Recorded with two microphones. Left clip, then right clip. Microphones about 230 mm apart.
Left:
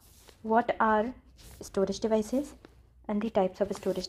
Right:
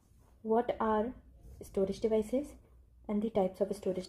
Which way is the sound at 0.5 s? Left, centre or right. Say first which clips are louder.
Left 6 dB; centre.